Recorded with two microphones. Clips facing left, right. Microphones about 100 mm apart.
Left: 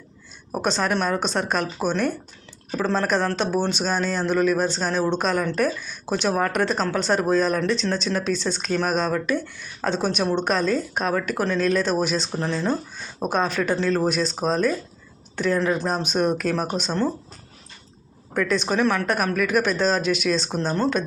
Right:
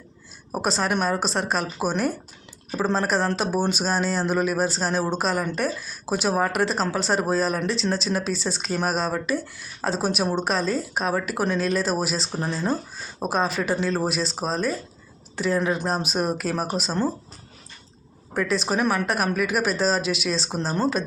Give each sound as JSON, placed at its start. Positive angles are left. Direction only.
{"t": 0.5, "sound": "speech", "side_deg": -5}
{"t": 18.3, "sound": "speech", "side_deg": -5}